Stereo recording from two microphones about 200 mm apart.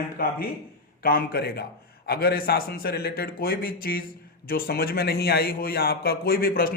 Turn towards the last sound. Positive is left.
turn(degrees=45)  # may be behind; listen again after turning